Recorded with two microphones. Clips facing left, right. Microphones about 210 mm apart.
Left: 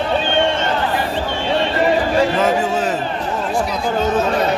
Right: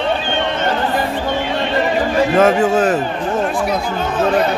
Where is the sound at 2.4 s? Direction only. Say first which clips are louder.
Right 4 dB; 50° right (ahead or behind).